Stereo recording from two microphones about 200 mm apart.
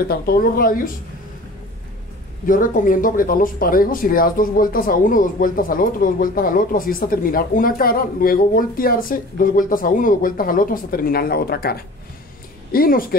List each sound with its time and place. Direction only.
0.1 s speech: 45° left (ahead or behind)
2.4 s speech: 40° left (ahead or behind)